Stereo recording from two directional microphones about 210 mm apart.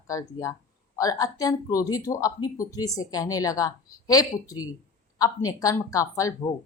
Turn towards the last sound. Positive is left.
turn(degrees=15)  # may be behind; listen again after turning